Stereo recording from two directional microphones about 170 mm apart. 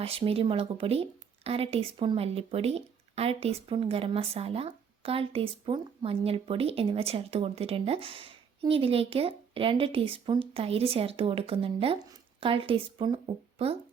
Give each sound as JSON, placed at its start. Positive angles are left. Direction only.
{"t": 0.0, "sound": "speech", "side_deg": -35}